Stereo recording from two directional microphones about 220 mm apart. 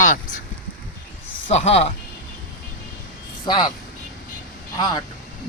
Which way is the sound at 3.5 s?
20° left (ahead or behind).